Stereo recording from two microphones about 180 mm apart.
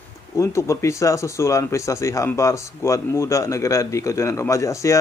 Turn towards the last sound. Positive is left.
turn(degrees=15)  # may be behind; listen again after turning